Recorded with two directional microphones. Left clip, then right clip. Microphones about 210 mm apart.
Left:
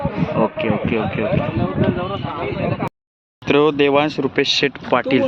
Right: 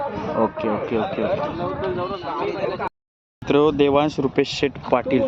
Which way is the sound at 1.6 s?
55° left (ahead or behind).